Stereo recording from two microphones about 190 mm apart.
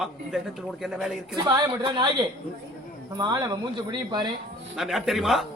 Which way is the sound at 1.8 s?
25° right (ahead or behind).